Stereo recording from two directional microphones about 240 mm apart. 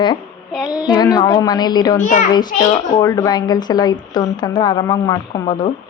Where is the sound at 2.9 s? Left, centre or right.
Centre.